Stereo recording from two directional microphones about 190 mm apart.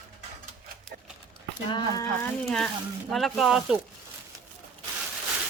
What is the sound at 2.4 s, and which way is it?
Speech, centre (ahead or behind).